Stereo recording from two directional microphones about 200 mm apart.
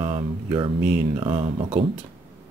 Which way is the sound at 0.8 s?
5° right (ahead or behind).